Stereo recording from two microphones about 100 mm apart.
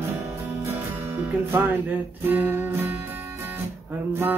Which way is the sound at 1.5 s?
20° right (ahead or behind).